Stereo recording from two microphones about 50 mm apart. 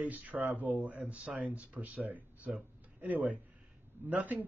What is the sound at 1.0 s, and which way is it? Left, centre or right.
A man's voice, right.